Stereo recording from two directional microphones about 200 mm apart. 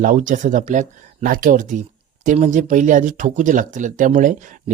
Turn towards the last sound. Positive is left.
turn(degrees=-40)  # may be behind; listen again after turning